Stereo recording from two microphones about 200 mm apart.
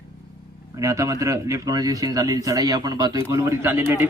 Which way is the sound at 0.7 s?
15° right (ahead or behind).